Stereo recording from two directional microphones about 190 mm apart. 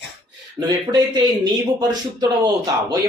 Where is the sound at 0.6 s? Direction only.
20° right (ahead or behind).